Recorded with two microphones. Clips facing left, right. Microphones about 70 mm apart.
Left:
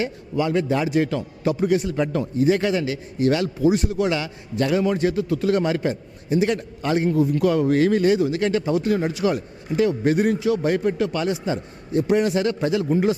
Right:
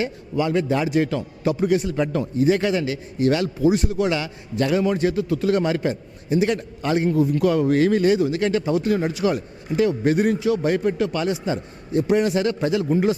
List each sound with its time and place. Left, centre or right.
0.0 s a man's voice: centre